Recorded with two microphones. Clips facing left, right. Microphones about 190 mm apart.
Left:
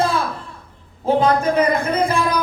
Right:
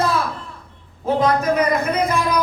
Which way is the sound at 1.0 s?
30° left (ahead or behind).